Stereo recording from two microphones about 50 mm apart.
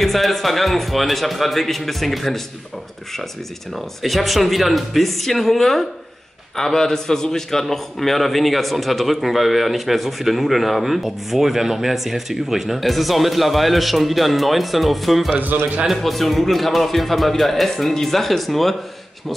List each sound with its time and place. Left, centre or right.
0.0 s a man's voice: centre
4.0 s a man's voice: centre
15.4 s speech: right
15.9 s a man's voice: centre